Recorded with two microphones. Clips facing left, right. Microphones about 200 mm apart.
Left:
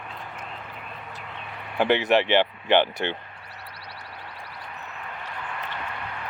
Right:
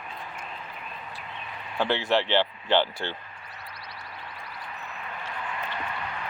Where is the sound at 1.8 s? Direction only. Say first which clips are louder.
Left 4 dB; 20° left (ahead or behind).